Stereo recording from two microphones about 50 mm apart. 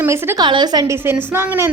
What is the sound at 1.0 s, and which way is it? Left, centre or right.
Speech, right.